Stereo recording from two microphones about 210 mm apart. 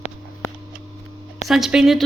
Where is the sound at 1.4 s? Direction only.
Centre (ahead or behind).